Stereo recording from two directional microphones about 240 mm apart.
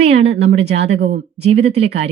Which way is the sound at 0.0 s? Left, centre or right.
Right.